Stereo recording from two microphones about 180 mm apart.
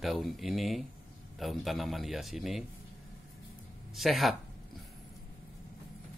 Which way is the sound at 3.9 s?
Centre (ahead or behind).